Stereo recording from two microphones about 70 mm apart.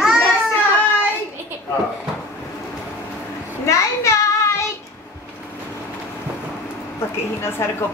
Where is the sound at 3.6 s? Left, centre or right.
Left.